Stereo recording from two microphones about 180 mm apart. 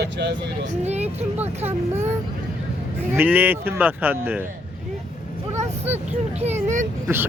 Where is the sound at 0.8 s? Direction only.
35° right (ahead or behind).